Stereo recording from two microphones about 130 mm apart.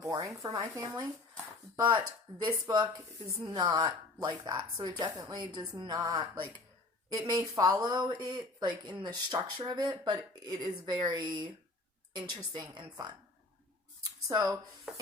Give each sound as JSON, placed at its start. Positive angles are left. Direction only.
{"t": 0.0, "sound": "speech", "side_deg": -30}
{"t": 14.3, "sound": "speech", "side_deg": -35}
{"t": 14.9, "sound": "a sound", "side_deg": -5}